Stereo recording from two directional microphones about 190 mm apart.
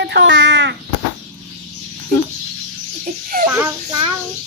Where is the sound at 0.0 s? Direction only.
65° right (ahead or behind).